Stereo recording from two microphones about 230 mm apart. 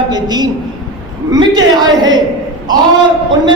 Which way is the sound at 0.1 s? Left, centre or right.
Centre.